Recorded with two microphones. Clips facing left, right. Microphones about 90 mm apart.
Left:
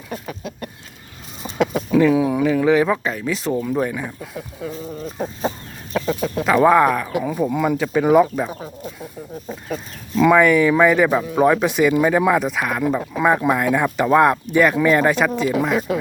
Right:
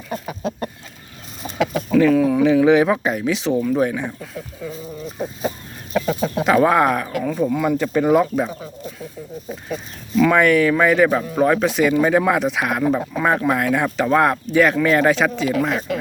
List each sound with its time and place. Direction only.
0.4 s chicken: 30° right (ahead or behind)
1.4 s speech: centre (ahead or behind)
3.3 s speech: 5° left (ahead or behind)
5.2 s chicken: 30° left (ahead or behind)
6.2 s speech: 10° right (ahead or behind)
7.1 s speech: 15° left (ahead or behind)
9.7 s speech: 5° left (ahead or behind)
13.1 s speech: 5° left (ahead or behind)